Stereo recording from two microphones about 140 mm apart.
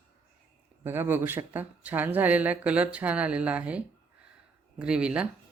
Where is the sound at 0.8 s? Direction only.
15° right (ahead or behind).